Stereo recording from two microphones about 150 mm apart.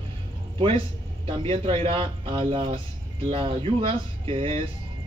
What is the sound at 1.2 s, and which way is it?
A man's voice, 40° right (ahead or behind).